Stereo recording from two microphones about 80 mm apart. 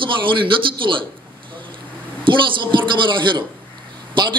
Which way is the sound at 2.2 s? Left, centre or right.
Right.